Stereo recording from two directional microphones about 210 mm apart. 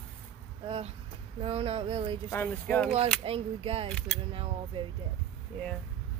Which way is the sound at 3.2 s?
25° right (ahead or behind).